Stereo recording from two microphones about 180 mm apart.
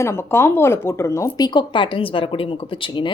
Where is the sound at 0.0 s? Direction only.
15° left (ahead or behind).